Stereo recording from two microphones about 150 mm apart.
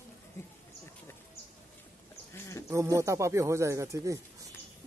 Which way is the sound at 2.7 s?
20° right (ahead or behind).